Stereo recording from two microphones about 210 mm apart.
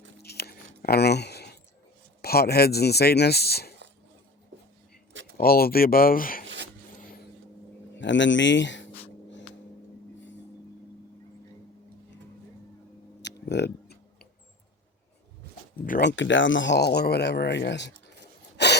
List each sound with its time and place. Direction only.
0.2 s biting: 50° left (ahead or behind)
2.2 s speech: 50° left (ahead or behind)
5.4 s speech: 45° left (ahead or behind)
6.4 s a sound: 60° right (ahead or behind)
7.9 s speech: 60° left (ahead or behind)
13.2 s music: 55° left (ahead or behind)
15.9 s speech: 55° left (ahead or behind)
18.5 s a sound: 55° left (ahead or behind)